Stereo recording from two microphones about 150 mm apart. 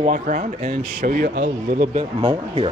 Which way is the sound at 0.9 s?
65° right (ahead or behind).